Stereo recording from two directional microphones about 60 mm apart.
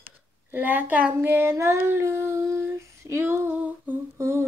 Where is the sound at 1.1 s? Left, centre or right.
Right.